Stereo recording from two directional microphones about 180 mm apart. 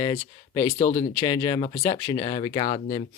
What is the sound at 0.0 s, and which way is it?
Speech, 20° left (ahead or behind).